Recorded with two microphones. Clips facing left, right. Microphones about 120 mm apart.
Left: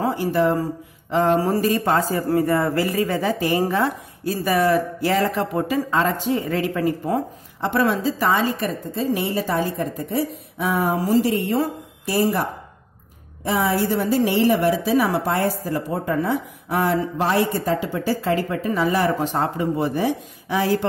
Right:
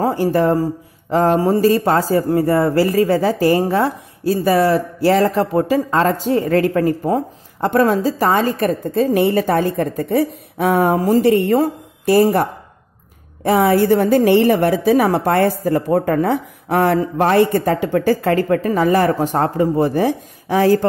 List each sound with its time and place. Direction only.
0.0 s a woman's voice: 40° right (ahead or behind)